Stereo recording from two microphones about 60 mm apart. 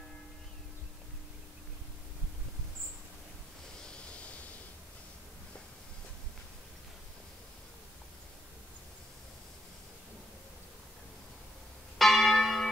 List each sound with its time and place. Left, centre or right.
3.9 s pink noise: centre
12.0 s church bell: centre